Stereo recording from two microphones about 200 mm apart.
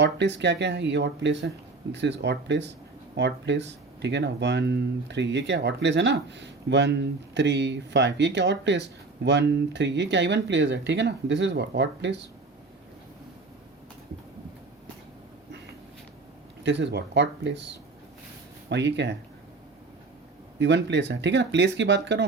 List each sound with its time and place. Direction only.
0.0 s speech: 60° right (ahead or behind)
16.6 s speech: 60° right (ahead or behind)
20.6 s speech: 60° right (ahead or behind)